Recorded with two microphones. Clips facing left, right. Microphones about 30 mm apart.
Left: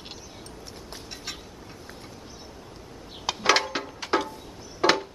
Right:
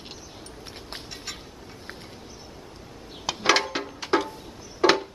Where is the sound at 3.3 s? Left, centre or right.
Centre.